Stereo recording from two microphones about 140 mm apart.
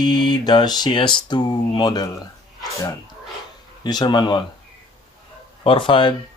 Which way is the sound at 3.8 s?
30° left (ahead or behind).